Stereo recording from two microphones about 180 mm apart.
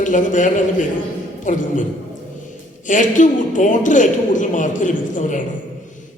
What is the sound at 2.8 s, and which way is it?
A man's voice, 45° left (ahead or behind).